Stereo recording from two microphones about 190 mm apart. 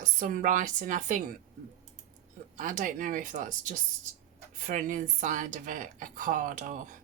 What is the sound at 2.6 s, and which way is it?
Speech, 40° right (ahead or behind).